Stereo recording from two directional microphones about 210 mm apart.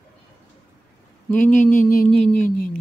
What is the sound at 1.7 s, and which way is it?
Music, 40° left (ahead or behind).